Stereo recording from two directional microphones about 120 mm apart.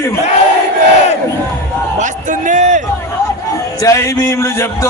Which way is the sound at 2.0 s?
90° right.